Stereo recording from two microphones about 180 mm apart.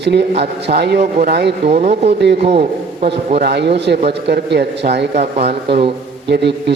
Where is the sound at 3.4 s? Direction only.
65° right (ahead or behind).